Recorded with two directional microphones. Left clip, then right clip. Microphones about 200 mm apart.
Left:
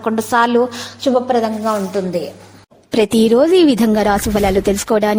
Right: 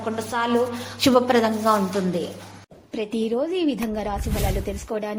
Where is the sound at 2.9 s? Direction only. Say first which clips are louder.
Left 13 dB; 65° left (ahead or behind).